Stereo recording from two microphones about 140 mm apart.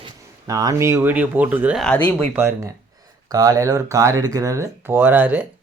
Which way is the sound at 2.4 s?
20° right (ahead or behind).